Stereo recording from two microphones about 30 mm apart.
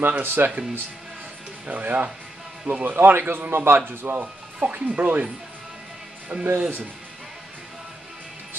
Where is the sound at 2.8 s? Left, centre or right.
Right.